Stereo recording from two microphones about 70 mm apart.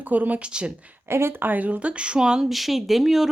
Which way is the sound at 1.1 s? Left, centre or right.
Right.